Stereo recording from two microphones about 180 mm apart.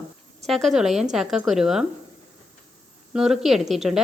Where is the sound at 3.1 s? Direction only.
Centre (ahead or behind).